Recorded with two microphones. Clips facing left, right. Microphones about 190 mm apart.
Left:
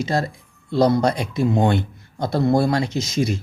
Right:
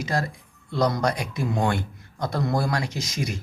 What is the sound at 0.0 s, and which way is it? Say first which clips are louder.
Speech: left 5 dB; 25° left (ahead or behind).